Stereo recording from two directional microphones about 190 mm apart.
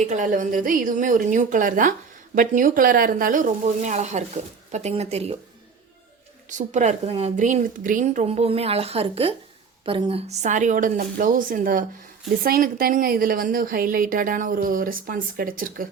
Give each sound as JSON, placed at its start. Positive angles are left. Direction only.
{"t": 0.0, "sound": "a woman's voice", "side_deg": -40}
{"t": 6.5, "sound": "a woman's voice", "side_deg": -40}